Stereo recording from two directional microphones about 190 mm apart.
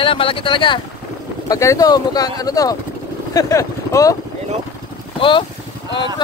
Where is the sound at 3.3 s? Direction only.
15° left (ahead or behind).